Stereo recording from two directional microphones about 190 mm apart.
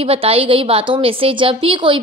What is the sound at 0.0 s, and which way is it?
A woman's voice, 30° right (ahead or behind).